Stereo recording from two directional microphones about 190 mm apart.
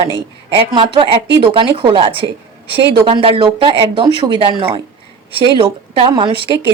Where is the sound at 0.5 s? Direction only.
25° right (ahead or behind).